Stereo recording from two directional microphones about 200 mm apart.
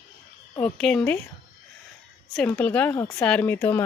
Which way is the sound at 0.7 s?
5° left (ahead or behind).